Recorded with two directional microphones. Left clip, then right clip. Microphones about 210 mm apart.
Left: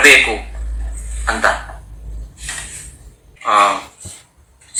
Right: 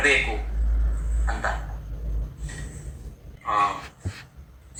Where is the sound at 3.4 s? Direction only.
45° left (ahead or behind).